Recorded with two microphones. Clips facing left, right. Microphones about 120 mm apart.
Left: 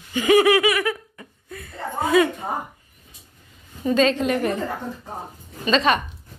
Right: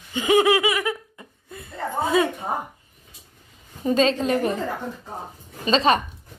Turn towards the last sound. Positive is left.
turn(degrees=-30)  # may be behind; listen again after turning